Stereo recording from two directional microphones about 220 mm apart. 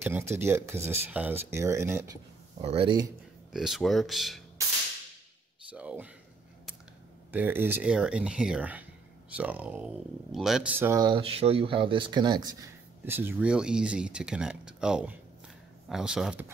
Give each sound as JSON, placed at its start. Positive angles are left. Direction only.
{"t": 0.0, "sound": "speech", "side_deg": -10}
{"t": 2.6, "sound": "speech", "side_deg": -25}
{"t": 3.5, "sound": "speech", "side_deg": 0}
{"t": 5.7, "sound": "speech", "side_deg": -5}
{"t": 7.3, "sound": "speech", "side_deg": -10}